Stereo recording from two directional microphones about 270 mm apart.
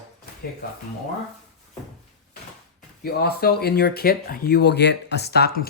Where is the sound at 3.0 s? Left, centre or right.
Left.